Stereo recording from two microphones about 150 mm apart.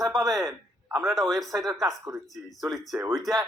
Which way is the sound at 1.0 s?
Centre (ahead or behind).